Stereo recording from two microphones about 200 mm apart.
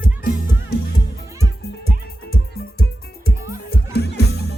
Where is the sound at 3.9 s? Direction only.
55° left (ahead or behind).